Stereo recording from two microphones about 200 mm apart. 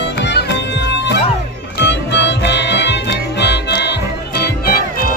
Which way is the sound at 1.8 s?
60° left (ahead or behind).